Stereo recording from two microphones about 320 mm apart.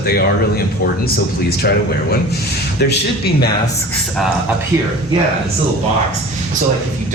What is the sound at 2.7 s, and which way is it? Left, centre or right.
Speech, left.